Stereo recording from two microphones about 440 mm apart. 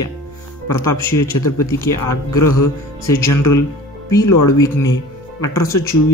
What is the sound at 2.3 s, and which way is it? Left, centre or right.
Speech, left.